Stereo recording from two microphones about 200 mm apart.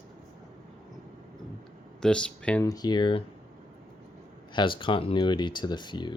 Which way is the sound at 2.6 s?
20° left (ahead or behind).